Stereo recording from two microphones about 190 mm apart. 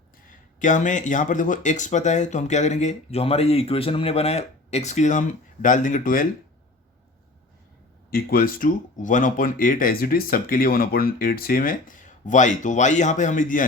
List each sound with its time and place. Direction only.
0.3 s speech: 40° left (ahead or behind)
8.1 s speech: 50° left (ahead or behind)